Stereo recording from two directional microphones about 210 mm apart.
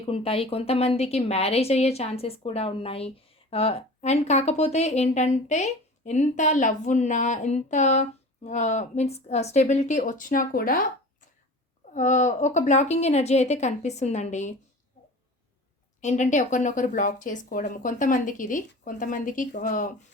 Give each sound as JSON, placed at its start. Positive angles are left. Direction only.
{"t": 0.0, "sound": "a woman's voice", "side_deg": 25}
{"t": 11.9, "sound": "speech", "side_deg": 35}
{"t": 16.0, "sound": "speech", "side_deg": 35}